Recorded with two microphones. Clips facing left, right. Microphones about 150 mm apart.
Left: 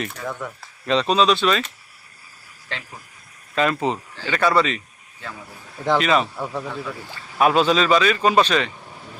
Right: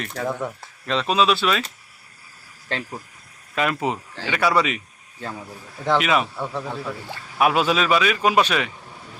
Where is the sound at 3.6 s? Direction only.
5° right (ahead or behind).